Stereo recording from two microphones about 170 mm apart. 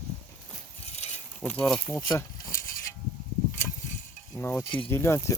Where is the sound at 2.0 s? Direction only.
25° left (ahead or behind).